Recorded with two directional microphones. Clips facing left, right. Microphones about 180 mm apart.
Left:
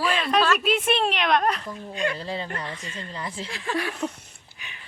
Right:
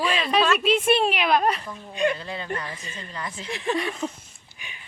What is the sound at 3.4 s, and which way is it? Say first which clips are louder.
Speech: right 4 dB; 20° right (ahead or behind).